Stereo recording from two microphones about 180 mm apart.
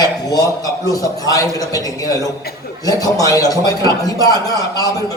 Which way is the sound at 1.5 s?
20° left (ahead or behind).